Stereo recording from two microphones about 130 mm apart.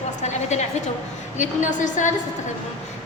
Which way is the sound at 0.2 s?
60° left (ahead or behind).